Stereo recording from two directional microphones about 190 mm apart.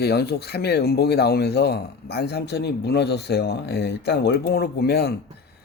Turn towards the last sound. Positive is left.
turn(degrees=55)  # may be behind; listen again after turning